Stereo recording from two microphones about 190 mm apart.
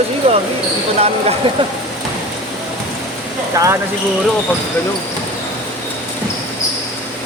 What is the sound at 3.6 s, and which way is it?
Speech, 15° right (ahead or behind).